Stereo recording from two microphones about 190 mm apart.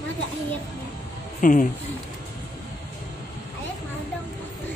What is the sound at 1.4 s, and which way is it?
Speech, 45° left (ahead or behind).